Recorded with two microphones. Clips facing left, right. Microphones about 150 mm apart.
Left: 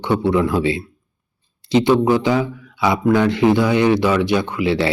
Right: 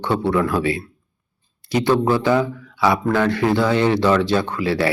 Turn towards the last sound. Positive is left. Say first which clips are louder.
# left 1 dB
turn(degrees=20)  # may be behind; listen again after turning